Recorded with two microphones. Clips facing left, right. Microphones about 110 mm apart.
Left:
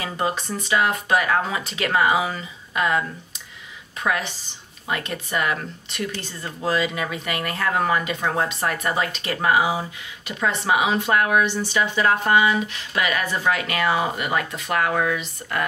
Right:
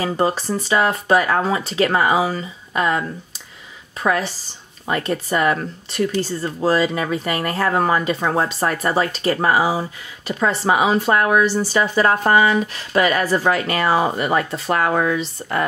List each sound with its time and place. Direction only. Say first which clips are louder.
0.0 s speech: right 6 dB; 35° right (ahead or behind)
4.0 s speech: right 5 dB; 35° right (ahead or behind)